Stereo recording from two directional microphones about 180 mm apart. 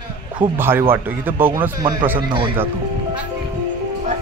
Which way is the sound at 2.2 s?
25° right (ahead or behind).